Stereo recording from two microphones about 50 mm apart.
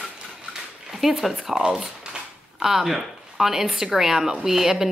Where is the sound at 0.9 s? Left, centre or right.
Centre.